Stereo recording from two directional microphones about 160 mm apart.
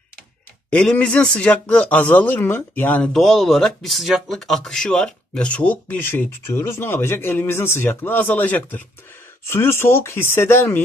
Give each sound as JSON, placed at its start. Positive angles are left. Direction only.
{"t": 0.7, "sound": "a man's voice", "side_deg": 10}